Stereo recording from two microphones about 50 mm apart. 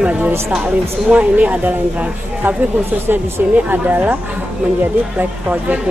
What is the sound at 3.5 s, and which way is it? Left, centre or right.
Speech, right.